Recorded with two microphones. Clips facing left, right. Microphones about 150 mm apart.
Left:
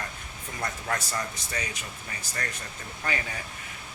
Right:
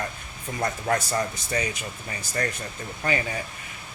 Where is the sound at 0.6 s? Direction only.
30° right (ahead or behind).